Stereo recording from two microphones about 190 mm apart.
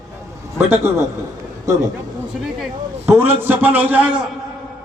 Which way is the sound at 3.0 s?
10° right (ahead or behind).